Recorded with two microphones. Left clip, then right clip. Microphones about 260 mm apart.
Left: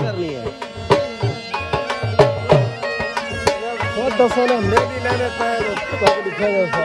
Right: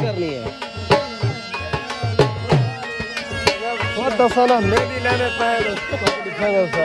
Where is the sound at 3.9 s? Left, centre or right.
Centre.